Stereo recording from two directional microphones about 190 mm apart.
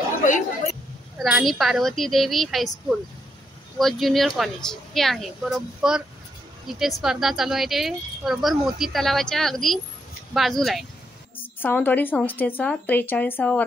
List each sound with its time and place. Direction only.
0.2 s speech: 40° left (ahead or behind)
1.1 s speech: centre (ahead or behind)